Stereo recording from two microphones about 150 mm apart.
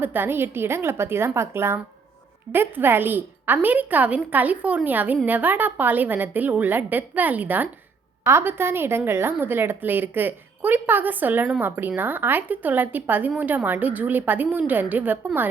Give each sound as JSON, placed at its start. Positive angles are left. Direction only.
{"t": 0.0, "sound": "a woman's voice", "side_deg": -15}